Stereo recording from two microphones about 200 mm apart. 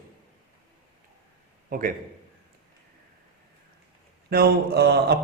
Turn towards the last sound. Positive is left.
turn(degrees=-55)  # may be behind; listen again after turning